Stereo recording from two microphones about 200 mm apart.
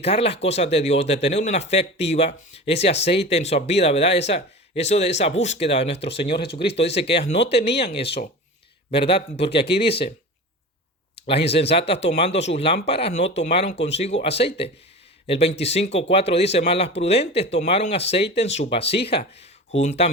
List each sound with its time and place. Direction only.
0.0 s speech: 30° left (ahead or behind)
6.1 s speech: 55° left (ahead or behind)
6.7 s speech: 30° left (ahead or behind)
7.5 s speech: 55° left (ahead or behind)
8.9 s speech: 30° left (ahead or behind)
9.6 s speech: 55° left (ahead or behind)
11.7 s speech: 30° left (ahead or behind)